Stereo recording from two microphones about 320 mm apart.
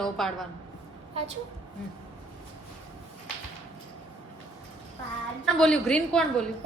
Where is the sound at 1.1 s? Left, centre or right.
Centre.